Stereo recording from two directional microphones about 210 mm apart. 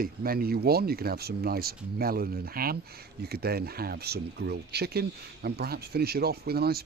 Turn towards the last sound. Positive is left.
turn(degrees=-50)  # may be behind; listen again after turning